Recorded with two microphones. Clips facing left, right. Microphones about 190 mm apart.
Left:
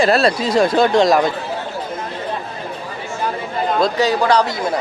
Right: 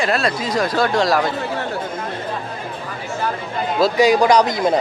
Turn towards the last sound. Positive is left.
turn(degrees=-20)  # may be behind; listen again after turning